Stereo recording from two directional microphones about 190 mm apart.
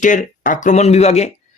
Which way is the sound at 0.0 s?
40° left (ahead or behind).